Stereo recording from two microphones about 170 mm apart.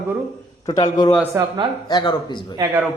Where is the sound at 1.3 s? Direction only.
25° right (ahead or behind).